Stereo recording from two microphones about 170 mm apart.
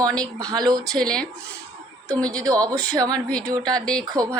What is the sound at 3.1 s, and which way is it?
Speech, 5° left (ahead or behind).